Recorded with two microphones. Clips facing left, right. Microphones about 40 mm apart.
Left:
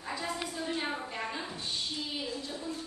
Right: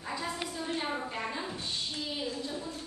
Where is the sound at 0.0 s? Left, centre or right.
Centre.